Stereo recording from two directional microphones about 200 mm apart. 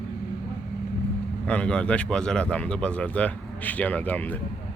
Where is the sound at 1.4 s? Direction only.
5° left (ahead or behind).